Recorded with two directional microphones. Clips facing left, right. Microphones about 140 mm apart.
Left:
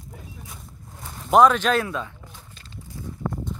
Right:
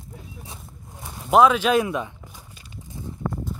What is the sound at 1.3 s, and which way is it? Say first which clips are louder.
Walk: even; 5° right (ahead or behind).